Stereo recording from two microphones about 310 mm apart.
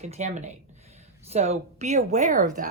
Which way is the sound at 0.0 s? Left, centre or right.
Right.